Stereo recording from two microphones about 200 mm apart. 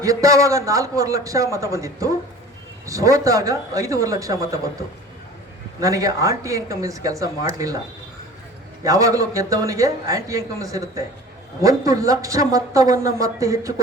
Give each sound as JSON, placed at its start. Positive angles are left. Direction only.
{"t": 0.0, "sound": "speech", "side_deg": -15}
{"t": 5.8, "sound": "speech", "side_deg": -15}
{"t": 8.8, "sound": "speech", "side_deg": -15}